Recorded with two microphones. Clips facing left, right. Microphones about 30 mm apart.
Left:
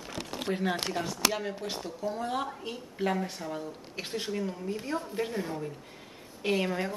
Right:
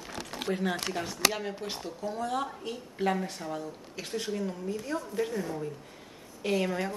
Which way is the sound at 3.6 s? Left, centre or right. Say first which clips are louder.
Left 1 dB; left.